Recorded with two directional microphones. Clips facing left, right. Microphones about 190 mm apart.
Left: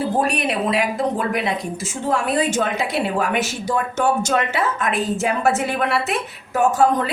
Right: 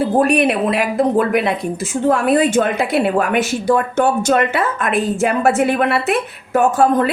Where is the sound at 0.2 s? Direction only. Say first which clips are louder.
Right 6 dB; 55° right (ahead or behind).